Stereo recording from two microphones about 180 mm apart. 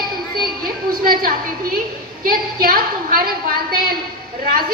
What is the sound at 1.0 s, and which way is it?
A man's voice, 55° right (ahead or behind).